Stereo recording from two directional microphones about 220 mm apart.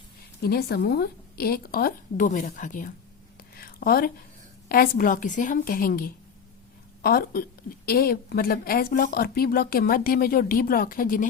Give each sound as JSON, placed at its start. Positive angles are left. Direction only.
{"t": 0.4, "sound": "a woman's voice", "side_deg": 45}
{"t": 3.6, "sound": "a sound", "side_deg": 40}
{"t": 4.7, "sound": "a woman's voice", "side_deg": 40}